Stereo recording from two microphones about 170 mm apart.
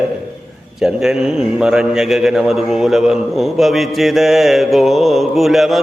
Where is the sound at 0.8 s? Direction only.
5° right (ahead or behind).